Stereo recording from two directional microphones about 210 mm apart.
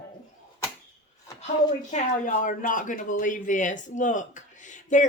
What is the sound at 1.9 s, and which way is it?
Speech, 35° left (ahead or behind).